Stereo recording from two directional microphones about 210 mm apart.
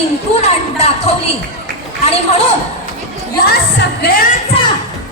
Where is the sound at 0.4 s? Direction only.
30° left (ahead or behind).